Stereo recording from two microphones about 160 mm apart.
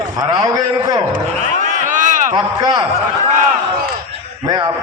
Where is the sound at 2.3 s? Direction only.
30° right (ahead or behind).